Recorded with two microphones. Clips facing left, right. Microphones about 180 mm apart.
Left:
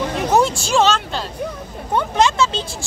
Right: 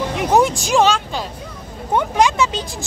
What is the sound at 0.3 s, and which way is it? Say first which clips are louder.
Speech: right 2 dB; 15° right (ahead or behind).